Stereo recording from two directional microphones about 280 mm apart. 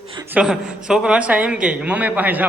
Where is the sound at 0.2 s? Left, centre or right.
Centre.